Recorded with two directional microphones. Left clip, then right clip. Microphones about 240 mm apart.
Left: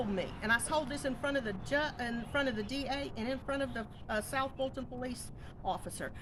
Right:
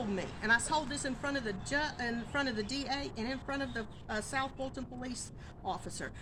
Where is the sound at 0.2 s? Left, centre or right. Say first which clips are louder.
Right 3 dB; centre.